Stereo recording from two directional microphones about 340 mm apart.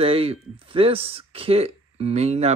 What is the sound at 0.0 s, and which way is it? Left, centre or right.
Speech, centre.